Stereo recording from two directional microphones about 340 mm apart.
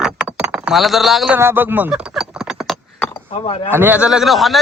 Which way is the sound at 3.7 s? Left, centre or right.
Centre.